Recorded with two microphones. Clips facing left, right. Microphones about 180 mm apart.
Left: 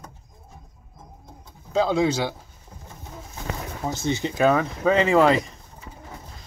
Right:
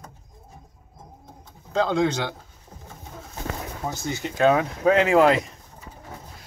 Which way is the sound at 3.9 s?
20° left (ahead or behind).